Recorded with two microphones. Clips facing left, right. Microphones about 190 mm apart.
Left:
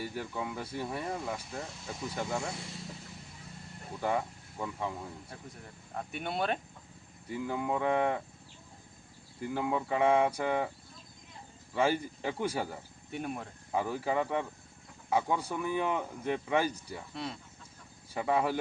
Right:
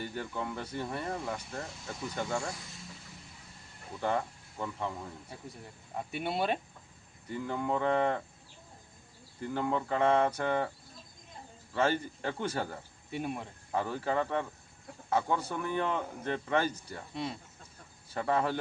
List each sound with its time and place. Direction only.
0.0 s speech: 5° left (ahead or behind)
4.0 s speech: 5° left (ahead or behind)
5.9 s speech: 5° right (ahead or behind)
7.3 s speech: 5° left (ahead or behind)
9.4 s speech: 5° left (ahead or behind)
11.7 s speech: 10° left (ahead or behind)
13.1 s speech: centre (ahead or behind)
13.7 s speech: 10° left (ahead or behind)
18.1 s speech: 10° left (ahead or behind)